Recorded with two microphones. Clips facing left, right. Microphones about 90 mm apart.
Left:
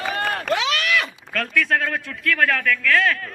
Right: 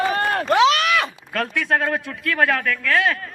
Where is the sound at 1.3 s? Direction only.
20° right (ahead or behind).